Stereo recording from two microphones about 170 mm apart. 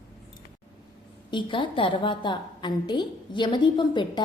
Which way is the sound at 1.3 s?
30° left (ahead or behind).